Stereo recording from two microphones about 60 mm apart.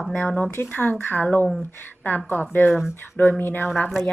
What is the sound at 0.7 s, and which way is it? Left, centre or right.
A woman's voice, left.